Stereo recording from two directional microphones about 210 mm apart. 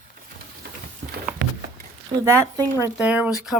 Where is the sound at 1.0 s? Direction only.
55° right (ahead or behind).